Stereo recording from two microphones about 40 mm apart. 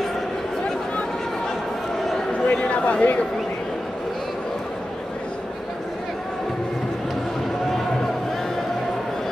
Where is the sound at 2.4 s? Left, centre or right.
Left.